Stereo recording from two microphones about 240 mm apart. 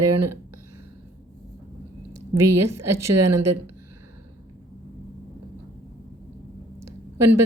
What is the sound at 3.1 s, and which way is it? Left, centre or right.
Speech, right.